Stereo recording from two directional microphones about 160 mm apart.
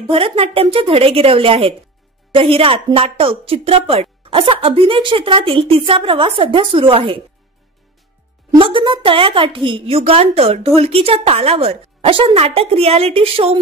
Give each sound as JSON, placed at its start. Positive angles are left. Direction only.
{"t": 0.1, "sound": "a woman's voice", "side_deg": -35}
{"t": 8.5, "sound": "a woman's voice", "side_deg": -35}